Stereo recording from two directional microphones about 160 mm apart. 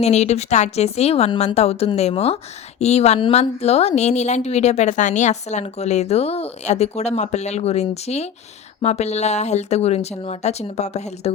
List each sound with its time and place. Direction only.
0.0 s a woman's voice: 45° left (ahead or behind)